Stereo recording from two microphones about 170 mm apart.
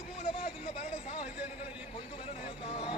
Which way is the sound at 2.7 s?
30° left (ahead or behind).